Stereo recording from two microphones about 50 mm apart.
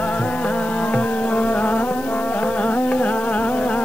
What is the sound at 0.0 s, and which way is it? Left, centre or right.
Music, left.